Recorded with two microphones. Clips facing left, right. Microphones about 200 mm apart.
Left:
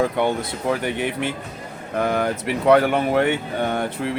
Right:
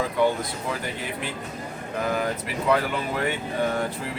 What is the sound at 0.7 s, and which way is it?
Speech, 70° left (ahead or behind).